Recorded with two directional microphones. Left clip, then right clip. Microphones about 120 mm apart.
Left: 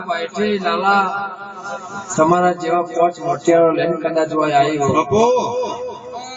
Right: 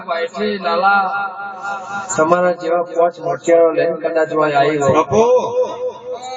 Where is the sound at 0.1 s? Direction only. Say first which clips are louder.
Right 1 dB; 35° right (ahead or behind).